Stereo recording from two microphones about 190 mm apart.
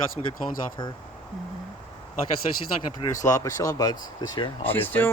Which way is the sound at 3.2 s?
15° left (ahead or behind).